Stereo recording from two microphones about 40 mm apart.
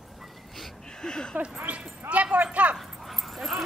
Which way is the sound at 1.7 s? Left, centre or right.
Right.